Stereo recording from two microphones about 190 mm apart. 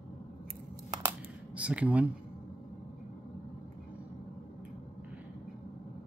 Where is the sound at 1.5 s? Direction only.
5° right (ahead or behind).